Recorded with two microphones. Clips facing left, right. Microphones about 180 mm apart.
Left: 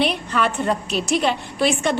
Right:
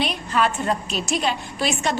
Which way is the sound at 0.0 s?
60° left (ahead or behind).